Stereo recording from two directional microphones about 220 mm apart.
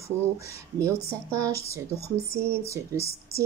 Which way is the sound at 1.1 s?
15° right (ahead or behind).